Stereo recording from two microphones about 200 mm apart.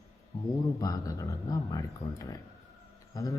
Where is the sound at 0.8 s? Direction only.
20° left (ahead or behind).